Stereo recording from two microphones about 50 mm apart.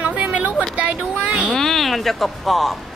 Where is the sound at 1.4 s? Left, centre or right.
Centre.